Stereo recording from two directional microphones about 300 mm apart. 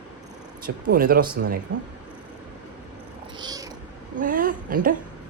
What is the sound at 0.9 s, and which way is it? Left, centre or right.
Speech, right.